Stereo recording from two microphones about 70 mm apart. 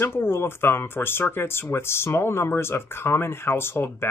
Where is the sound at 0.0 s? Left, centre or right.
Left.